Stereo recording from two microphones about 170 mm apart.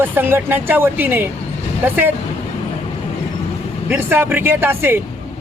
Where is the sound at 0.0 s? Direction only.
10° right (ahead or behind).